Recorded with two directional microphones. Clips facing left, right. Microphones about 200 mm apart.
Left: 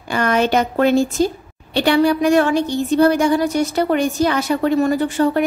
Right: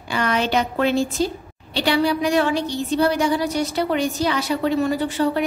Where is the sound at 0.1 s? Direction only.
50° left (ahead or behind).